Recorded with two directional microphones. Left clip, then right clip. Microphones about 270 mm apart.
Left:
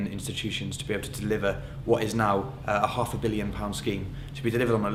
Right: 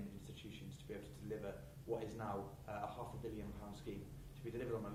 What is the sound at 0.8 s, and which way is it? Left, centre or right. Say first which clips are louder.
A man's voice: left 18 dB; centre.